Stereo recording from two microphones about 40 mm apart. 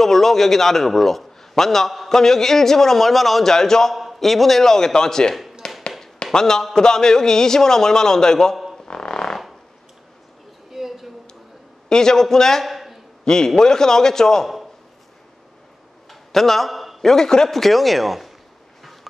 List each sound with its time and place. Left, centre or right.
0.0 s a man's voice: centre
3.5 s a man's voice: centre
3.9 s a man's voice: centre
5.3 s a sound: centre
6.3 s a man's voice: centre
8.8 s fart: left
10.7 s a sound: centre
11.9 s a man's voice: centre
12.6 s a sound: centre
13.2 s a man's voice: centre
16.1 s a sound: centre
17.0 s a man's voice: centre
17.6 s speech: centre